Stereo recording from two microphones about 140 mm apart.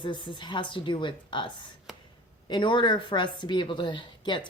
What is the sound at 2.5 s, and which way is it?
Speech, 35° left (ahead or behind).